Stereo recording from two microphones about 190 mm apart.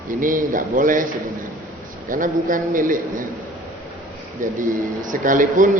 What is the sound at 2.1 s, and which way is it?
A man's voice, 45° right (ahead or behind).